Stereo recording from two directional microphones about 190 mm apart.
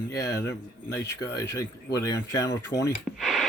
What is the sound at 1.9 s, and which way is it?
Speech, 20° left (ahead or behind).